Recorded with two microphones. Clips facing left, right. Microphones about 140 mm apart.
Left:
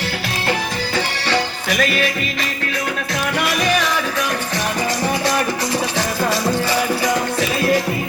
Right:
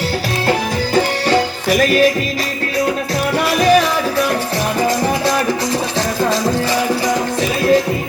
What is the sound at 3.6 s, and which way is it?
Music, 35° right (ahead or behind).